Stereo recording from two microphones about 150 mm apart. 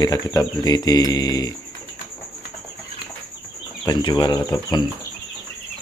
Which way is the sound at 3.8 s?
30° left (ahead or behind).